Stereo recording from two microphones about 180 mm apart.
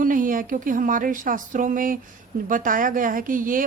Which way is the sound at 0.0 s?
50° right (ahead or behind).